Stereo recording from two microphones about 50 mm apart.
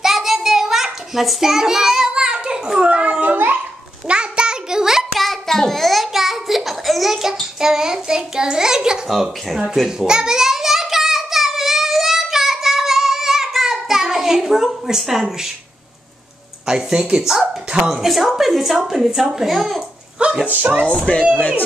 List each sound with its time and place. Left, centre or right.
0.0 s child singing: centre
2.8 s children playing: right
4.1 s a sound: centre
5.1 s child singing: centre
9.1 s a woman's voice: centre
9.8 s a sound: centre
16.6 s speech: centre
17.7 s a woman's voice: centre
20.4 s speech: right
21.4 s speech: left